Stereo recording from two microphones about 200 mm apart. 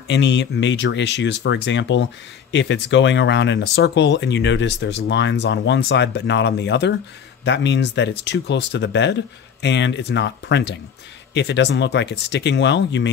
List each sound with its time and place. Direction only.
0.1 s speech: 60° left (ahead or behind)